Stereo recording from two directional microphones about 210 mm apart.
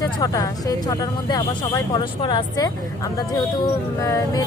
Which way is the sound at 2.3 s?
20° left (ahead or behind).